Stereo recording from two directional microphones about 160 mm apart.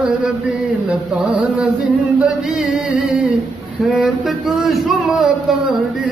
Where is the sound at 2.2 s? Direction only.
5° right (ahead or behind).